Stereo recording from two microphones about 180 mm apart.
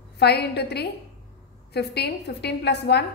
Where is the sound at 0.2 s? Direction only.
65° left (ahead or behind).